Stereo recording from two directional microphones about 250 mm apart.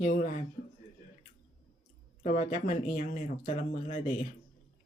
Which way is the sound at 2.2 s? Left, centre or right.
Left.